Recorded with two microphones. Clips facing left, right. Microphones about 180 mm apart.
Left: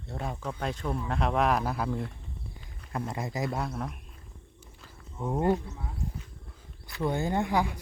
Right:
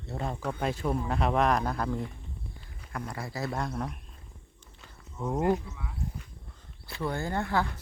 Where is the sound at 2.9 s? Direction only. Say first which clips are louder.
Left 3 dB; 20° left (ahead or behind).